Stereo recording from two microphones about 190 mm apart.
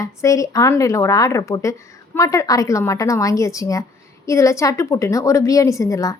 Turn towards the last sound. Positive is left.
turn(degrees=15)  # may be behind; listen again after turning